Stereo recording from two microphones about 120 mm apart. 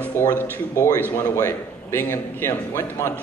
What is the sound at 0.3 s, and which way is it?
A man's voice, 25° left (ahead or behind).